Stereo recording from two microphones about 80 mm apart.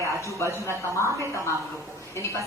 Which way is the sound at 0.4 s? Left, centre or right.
Right.